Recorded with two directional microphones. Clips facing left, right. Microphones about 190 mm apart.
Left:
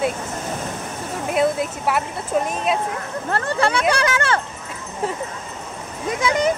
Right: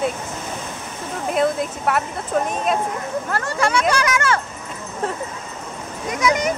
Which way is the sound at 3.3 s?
30° left (ahead or behind).